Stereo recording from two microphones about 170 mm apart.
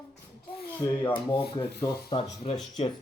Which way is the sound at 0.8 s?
25° left (ahead or behind).